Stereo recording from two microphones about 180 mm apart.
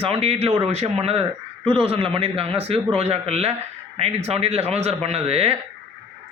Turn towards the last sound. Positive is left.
turn(degrees=-35)  # may be behind; listen again after turning